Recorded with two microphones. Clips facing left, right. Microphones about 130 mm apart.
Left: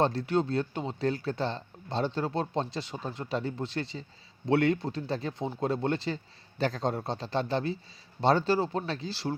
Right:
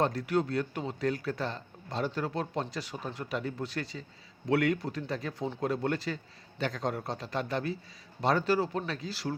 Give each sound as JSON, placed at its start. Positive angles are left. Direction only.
{"t": 0.0, "sound": "speech", "side_deg": 30}